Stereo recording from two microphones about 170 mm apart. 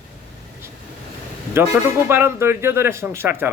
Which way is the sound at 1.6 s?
15° right (ahead or behind).